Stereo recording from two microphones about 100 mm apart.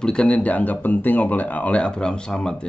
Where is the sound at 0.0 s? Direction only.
10° left (ahead or behind).